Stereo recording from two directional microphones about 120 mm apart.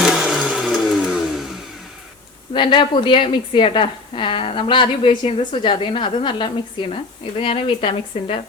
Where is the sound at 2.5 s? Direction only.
40° left (ahead or behind).